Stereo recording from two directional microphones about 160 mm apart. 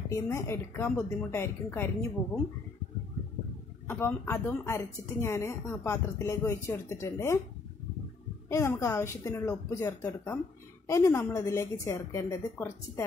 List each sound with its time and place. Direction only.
0.1 s a woman's voice: 20° left (ahead or behind)
3.8 s a woman's voice: 15° left (ahead or behind)
8.5 s a woman's voice: 20° left (ahead or behind)